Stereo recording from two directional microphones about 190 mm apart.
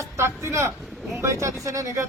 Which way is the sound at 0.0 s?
15° right (ahead or behind).